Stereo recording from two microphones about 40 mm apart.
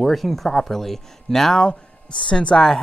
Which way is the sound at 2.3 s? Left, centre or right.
Left.